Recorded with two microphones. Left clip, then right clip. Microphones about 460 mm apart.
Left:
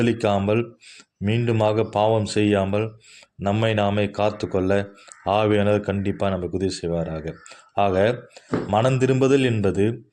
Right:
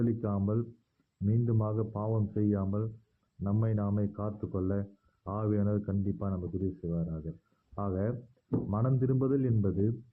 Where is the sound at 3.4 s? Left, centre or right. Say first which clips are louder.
Left 15 dB; centre.